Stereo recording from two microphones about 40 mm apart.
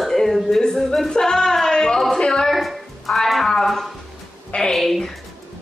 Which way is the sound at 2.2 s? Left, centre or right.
Left.